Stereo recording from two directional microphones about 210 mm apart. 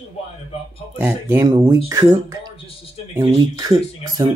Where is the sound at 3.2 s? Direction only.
20° right (ahead or behind).